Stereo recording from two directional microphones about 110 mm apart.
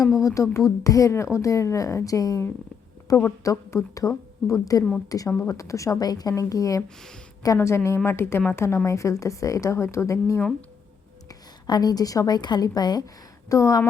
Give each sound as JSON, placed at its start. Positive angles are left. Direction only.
{"t": 0.0, "sound": "a woman's voice", "side_deg": 30}
{"t": 6.8, "sound": "speech", "side_deg": 5}
{"t": 7.4, "sound": "a woman's voice", "side_deg": 30}
{"t": 11.3, "sound": "a woman's voice", "side_deg": 35}